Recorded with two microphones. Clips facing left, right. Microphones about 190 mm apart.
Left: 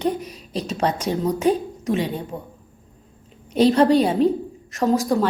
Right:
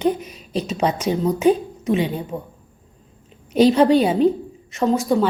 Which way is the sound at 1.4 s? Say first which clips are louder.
Right 5 dB; 35° left (ahead or behind).